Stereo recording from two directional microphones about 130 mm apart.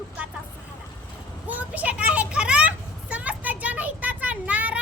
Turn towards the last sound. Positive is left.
turn(degrees=-10)  # may be behind; listen again after turning